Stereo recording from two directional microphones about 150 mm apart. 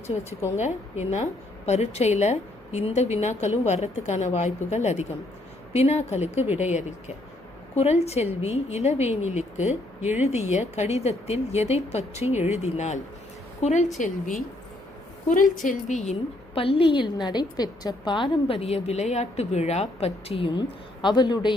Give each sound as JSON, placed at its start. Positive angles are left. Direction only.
{"t": 0.1, "sound": "a woman's voice", "side_deg": 35}
{"t": 0.6, "sound": "a woman's voice", "side_deg": 50}
{"t": 15.3, "sound": "a woman's voice", "side_deg": 65}
{"t": 16.6, "sound": "a woman's voice", "side_deg": 35}
{"t": 20.6, "sound": "speech", "side_deg": 30}